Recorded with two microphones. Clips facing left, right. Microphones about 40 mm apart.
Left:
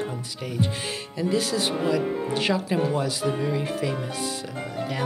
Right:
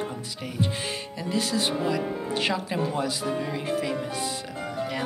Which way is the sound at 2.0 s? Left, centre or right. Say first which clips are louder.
Left 3 dB; centre.